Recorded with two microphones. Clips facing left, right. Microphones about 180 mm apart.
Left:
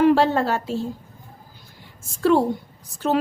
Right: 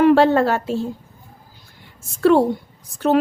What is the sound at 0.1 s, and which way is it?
Speech, 60° right (ahead or behind).